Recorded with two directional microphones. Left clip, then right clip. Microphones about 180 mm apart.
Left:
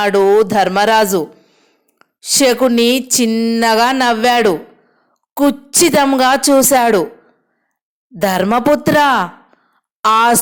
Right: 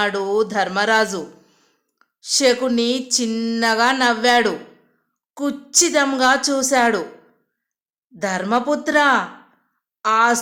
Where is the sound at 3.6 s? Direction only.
40° left (ahead or behind).